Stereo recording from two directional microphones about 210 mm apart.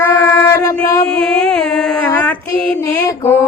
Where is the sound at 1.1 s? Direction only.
5° left (ahead or behind).